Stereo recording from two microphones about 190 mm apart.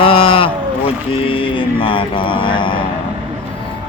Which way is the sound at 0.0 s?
30° left (ahead or behind).